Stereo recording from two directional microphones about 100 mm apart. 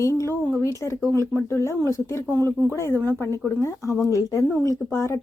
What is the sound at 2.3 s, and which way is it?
Speech, 35° right (ahead or behind).